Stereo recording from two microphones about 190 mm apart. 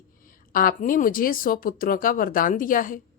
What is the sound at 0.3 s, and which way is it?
A woman's voice, 50° left (ahead or behind).